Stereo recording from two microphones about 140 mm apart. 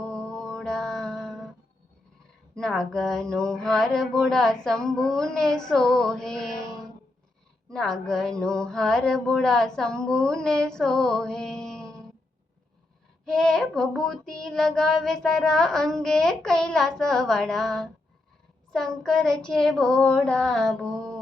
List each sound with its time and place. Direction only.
0.0 s mantra: 5° left (ahead or behind)
2.6 s child singing: 5° left (ahead or behind)
13.2 s child singing: 5° left (ahead or behind)